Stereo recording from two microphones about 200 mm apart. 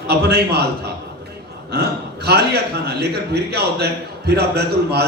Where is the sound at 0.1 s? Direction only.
55° right (ahead or behind).